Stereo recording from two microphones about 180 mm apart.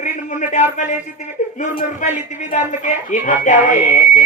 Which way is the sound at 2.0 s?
40° left (ahead or behind).